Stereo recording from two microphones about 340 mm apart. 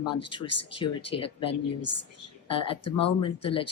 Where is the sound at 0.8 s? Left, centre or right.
Centre.